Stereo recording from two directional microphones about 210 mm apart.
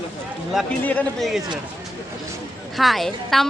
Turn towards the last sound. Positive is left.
turn(degrees=0)  # may be behind; listen again after turning